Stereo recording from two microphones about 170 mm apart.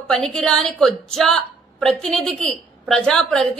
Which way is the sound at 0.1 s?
5° left (ahead or behind).